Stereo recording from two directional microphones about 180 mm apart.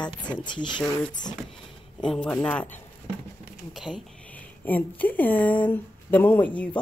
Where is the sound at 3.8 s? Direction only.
Centre (ahead or behind).